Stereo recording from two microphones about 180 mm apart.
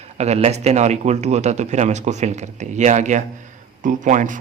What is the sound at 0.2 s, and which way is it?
Speech, 35° right (ahead or behind).